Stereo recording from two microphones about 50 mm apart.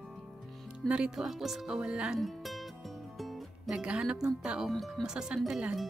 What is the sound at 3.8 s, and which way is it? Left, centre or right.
Speech, centre.